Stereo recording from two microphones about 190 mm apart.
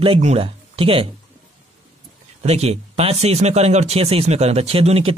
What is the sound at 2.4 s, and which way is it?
Speech, 35° right (ahead or behind).